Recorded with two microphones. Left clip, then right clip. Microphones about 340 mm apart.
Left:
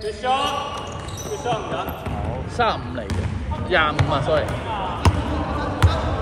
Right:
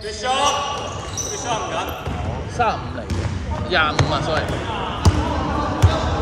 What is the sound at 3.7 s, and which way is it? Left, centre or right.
Speech, centre.